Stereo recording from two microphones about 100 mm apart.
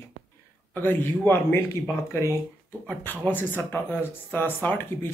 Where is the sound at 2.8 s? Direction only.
15° left (ahead or behind).